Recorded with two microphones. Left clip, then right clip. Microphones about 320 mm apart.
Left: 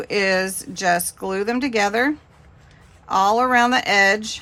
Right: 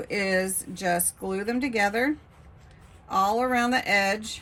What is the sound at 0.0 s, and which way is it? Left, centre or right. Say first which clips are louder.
Speech: left 6 dB; centre.